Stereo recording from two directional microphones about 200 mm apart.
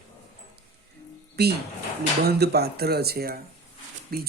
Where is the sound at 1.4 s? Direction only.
55° right (ahead or behind).